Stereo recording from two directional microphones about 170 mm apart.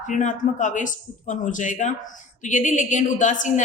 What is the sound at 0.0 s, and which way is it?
A woman's voice, 50° left (ahead or behind).